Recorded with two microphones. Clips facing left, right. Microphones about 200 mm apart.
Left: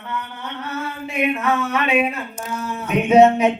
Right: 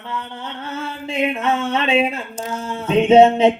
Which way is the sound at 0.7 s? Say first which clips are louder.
Right 1 dB; 25° right (ahead or behind).